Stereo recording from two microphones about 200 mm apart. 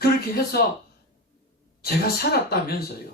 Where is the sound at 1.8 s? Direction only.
50° left (ahead or behind).